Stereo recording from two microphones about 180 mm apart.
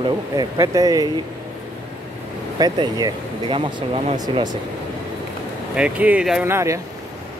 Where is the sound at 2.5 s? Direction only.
20° right (ahead or behind).